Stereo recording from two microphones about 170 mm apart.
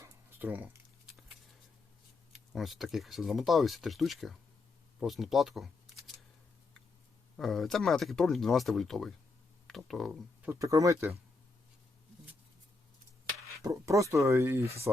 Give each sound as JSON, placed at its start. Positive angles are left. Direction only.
{"t": 0.0, "sound": "a sound", "side_deg": -10}
{"t": 2.5, "sound": "speech", "side_deg": 0}
{"t": 7.3, "sound": "speech", "side_deg": 0}
{"t": 10.4, "sound": "speech", "side_deg": -15}
{"t": 13.6, "sound": "speech", "side_deg": -20}